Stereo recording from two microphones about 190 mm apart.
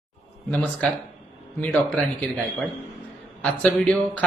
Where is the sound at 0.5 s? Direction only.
5° left (ahead or behind).